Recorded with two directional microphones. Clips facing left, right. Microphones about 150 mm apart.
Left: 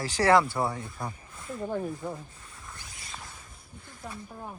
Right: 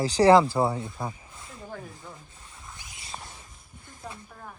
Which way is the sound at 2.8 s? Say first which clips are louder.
Even; 20° right (ahead or behind).